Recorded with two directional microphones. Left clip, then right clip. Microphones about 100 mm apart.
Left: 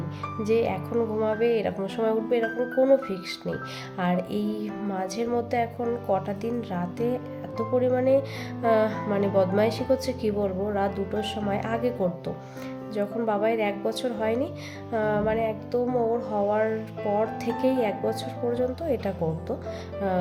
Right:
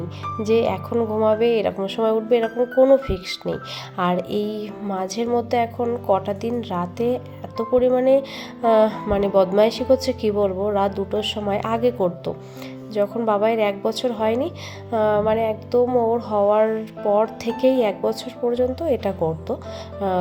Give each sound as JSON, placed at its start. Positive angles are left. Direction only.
{"t": 0.4, "sound": "speech", "side_deg": -40}